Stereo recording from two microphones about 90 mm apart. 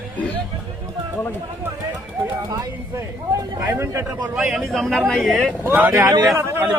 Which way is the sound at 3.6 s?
30° right (ahead or behind).